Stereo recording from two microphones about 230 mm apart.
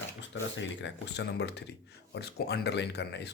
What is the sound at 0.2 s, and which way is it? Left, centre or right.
Speech, left.